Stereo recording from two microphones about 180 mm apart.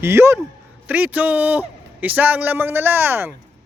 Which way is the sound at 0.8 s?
10° right (ahead or behind).